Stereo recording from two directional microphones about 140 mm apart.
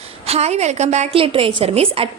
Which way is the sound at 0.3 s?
50° right (ahead or behind).